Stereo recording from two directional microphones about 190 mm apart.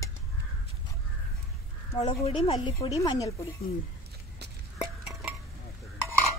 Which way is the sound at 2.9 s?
15° left (ahead or behind).